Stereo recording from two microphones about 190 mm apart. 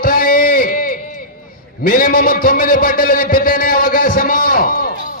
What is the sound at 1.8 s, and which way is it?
A man's voice, 50° left (ahead or behind).